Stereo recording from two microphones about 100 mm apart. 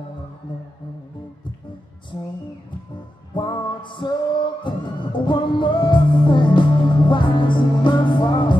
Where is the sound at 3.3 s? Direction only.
55° left (ahead or behind).